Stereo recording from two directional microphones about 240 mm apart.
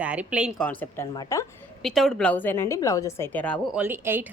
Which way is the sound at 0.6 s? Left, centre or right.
Centre.